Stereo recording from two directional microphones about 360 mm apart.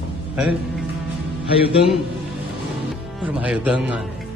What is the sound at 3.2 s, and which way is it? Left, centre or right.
Speech, centre.